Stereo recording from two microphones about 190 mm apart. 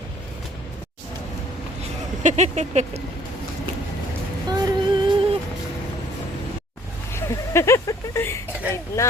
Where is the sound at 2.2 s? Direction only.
40° right (ahead or behind).